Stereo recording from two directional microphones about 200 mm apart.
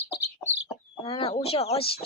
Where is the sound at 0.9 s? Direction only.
25° left (ahead or behind).